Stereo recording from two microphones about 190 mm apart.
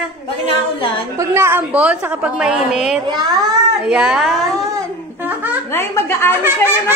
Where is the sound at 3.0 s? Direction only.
20° right (ahead or behind).